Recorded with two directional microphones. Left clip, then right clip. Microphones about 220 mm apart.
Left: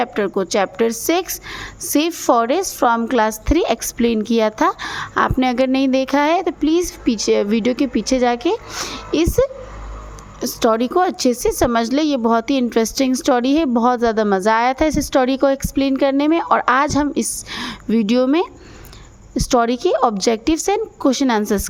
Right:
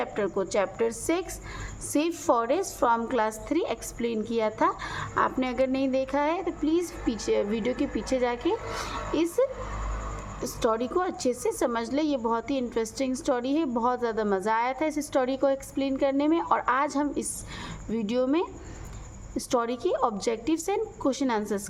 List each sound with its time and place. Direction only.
0.0 s a woman's voice: 40° left (ahead or behind)